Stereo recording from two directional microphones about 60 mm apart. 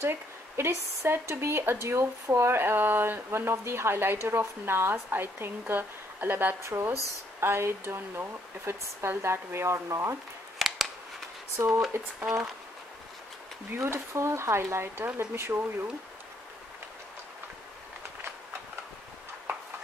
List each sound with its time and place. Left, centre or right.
0.0 s speech: right
3.3 s a woman's voice: right
6.6 s speech: right
11.5 s speech: right
13.7 s speech: right